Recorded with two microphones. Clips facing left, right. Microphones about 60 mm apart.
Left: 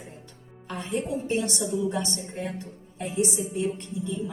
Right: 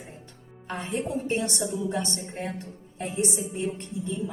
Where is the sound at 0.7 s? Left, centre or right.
Right.